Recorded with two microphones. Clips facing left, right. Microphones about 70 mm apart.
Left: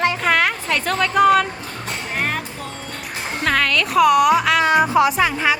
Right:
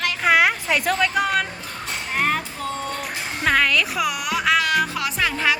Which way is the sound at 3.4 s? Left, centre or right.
Centre.